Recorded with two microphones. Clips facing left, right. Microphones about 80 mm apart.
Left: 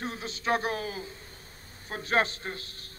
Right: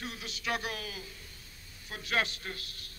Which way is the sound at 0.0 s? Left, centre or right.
Left.